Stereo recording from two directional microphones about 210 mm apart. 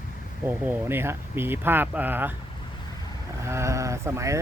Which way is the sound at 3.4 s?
15° right (ahead or behind).